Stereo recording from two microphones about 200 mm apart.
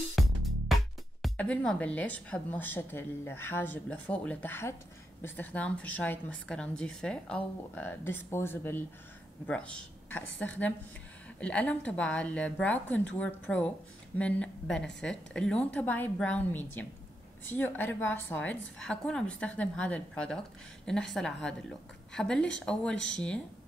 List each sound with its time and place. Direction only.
0.2 s music: centre (ahead or behind)
1.2 s a woman's voice: 5° left (ahead or behind)
11.3 s a woman's voice: 5° left (ahead or behind)
22.9 s speech: 65° left (ahead or behind)